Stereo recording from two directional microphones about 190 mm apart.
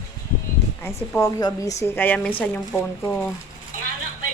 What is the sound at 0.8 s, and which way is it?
A woman's voice, 10° left (ahead or behind).